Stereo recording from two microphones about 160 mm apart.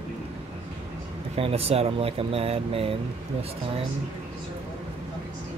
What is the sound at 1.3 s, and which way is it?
Speech, 40° right (ahead or behind).